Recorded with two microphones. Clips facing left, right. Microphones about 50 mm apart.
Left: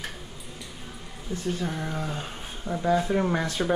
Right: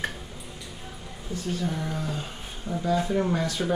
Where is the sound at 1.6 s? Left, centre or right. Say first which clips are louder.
Even; centre.